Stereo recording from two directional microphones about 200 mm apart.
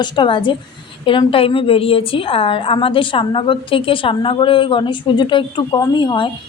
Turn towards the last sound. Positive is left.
turn(degrees=25)  # may be behind; listen again after turning